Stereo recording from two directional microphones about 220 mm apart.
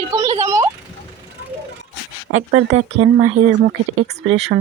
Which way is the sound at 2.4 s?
30° right (ahead or behind).